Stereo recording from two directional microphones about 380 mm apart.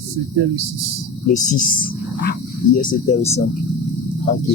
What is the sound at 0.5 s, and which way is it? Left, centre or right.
Speech, right.